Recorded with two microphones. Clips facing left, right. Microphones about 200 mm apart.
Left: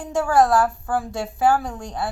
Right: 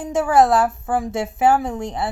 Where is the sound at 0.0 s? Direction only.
20° right (ahead or behind).